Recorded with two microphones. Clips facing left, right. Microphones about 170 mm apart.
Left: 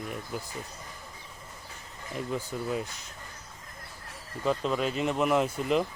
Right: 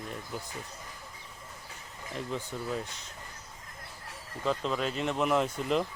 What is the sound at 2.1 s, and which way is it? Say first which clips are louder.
Speech: left 3 dB; 5° left (ahead or behind).